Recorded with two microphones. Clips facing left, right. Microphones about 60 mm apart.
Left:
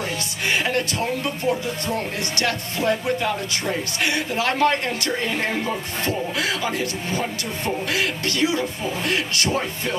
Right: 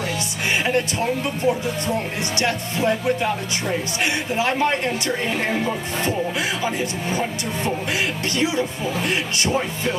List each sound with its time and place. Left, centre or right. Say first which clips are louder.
0.7 s speech: right 2 dB; centre
5.3 s speech: right 2 dB; centre
6.6 s speech: right 1 dB; right